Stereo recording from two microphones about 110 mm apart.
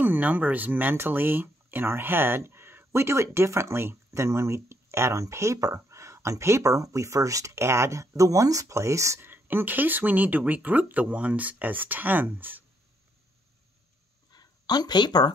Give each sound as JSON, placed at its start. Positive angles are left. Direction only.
{"t": 0.0, "sound": "speech", "side_deg": -15}
{"t": 14.3, "sound": "speech", "side_deg": 40}